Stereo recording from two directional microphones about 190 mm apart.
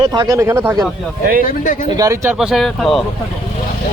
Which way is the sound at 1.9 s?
15° right (ahead or behind).